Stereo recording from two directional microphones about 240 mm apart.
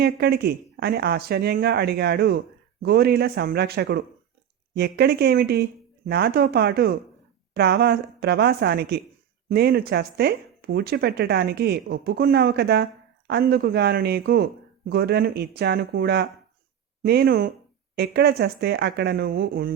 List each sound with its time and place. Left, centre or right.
0.0 s speech: right